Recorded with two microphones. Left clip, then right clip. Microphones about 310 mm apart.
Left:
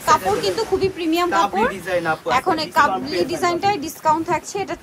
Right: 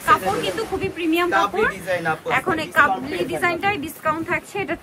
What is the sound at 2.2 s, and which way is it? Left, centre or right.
Speech, centre.